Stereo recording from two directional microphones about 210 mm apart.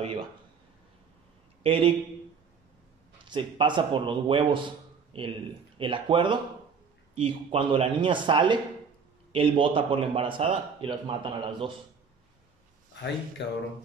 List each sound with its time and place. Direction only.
1.6 s speech: 25° right (ahead or behind)
3.3 s speech: 20° right (ahead or behind)
13.4 s a sound: 55° left (ahead or behind)